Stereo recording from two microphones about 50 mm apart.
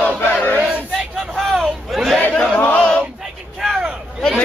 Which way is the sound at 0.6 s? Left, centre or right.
Right.